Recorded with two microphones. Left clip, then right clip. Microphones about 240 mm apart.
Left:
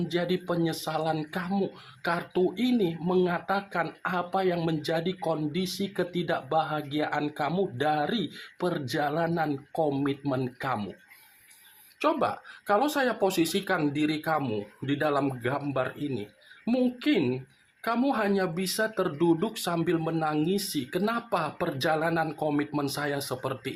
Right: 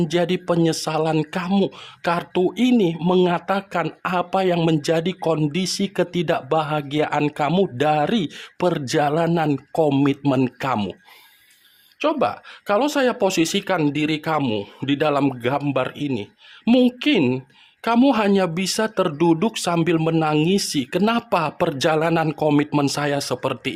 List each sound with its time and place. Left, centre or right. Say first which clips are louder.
0.1 s speech: right 6 dB; right
11.9 s speech: right 6 dB; right